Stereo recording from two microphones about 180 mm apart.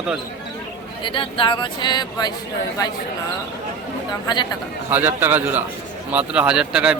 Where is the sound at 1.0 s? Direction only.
30° left (ahead or behind).